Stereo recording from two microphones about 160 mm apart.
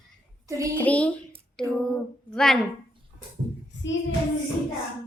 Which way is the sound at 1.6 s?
5° left (ahead or behind).